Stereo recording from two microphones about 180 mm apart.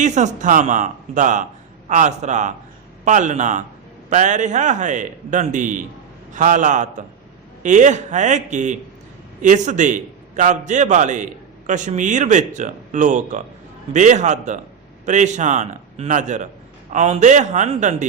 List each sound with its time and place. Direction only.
0.0 s a man's voice: 40° right (ahead or behind)